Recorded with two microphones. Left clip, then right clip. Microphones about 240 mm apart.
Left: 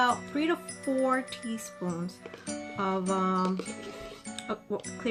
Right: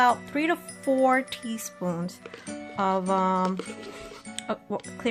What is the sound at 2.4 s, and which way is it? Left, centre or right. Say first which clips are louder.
Music: left 1 dB; centre.